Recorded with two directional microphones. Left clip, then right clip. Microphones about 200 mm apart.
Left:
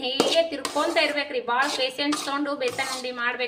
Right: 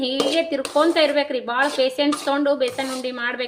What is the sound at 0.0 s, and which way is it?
A woman's voice, 30° right (ahead or behind).